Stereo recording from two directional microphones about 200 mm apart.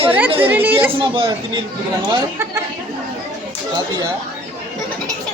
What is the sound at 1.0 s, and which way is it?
A woman's voice, 25° right (ahead or behind).